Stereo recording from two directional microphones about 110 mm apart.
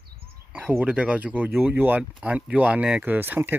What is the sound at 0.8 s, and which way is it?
Speech, 10° right (ahead or behind).